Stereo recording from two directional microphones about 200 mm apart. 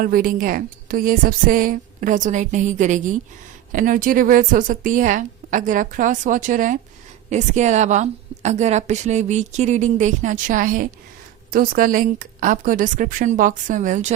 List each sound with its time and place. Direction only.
0.0 s a woman's voice: 45° right (ahead or behind)